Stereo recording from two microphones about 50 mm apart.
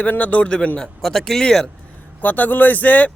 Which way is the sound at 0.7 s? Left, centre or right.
Centre.